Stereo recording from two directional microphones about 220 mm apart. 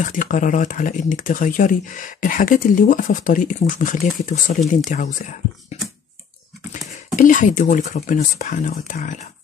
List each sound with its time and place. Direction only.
0.0 s speech: 35° left (ahead or behind)
7.2 s speech: 35° left (ahead or behind)